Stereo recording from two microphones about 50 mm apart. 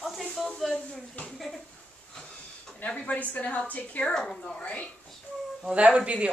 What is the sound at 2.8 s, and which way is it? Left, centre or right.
A woman's voice, left.